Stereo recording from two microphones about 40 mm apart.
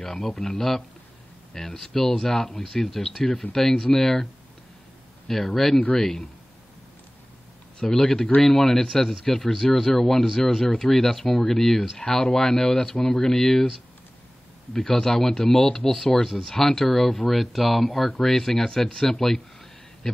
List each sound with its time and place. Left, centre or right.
0.2 s speech: centre
5.3 s speech: centre
7.8 s speech: centre
12.0 s speech: centre
14.7 s speech: centre